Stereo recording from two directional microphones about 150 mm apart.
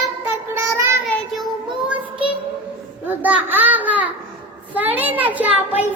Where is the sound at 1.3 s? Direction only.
5° right (ahead or behind).